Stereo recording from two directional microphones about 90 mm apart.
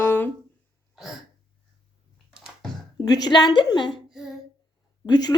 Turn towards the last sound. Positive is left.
turn(degrees=50)  # may be behind; listen again after turning